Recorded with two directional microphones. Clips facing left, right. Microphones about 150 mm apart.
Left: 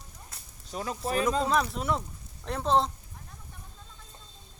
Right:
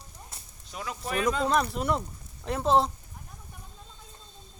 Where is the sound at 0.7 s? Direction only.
35° left (ahead or behind).